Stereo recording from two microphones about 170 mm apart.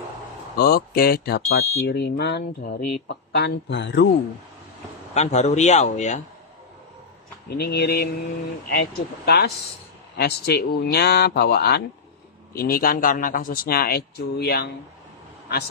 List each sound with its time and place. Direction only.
0.6 s speech: 60° left (ahead or behind); by 4.1 s 90° left
5.1 s a man's voice: 40° left (ahead or behind)
7.4 s a man's voice: 70° left (ahead or behind)